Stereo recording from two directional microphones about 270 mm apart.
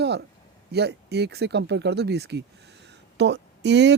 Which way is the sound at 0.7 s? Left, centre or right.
Right.